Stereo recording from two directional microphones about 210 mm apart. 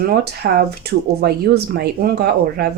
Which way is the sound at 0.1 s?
50° right (ahead or behind).